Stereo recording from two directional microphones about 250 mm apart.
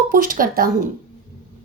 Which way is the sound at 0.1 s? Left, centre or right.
Right.